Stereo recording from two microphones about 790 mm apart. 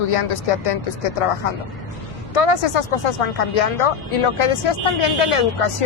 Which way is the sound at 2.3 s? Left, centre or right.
Left.